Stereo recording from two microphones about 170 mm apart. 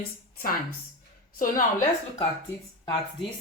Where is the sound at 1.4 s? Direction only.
55° left (ahead or behind).